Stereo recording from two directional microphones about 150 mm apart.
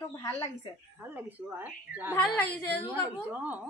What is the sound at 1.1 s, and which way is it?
A woman's voice, 10° right (ahead or behind).